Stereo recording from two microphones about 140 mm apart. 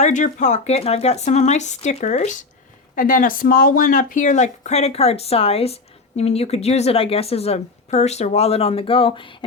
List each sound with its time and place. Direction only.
0.0 s speech: 60° left (ahead or behind)
2.9 s speech: 80° left; by 9.5 s 35° left (ahead or behind)